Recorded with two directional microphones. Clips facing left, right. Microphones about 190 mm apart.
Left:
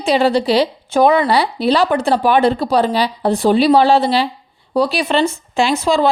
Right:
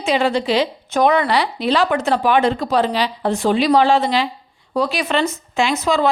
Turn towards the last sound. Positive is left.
turn(degrees=30)  # may be behind; listen again after turning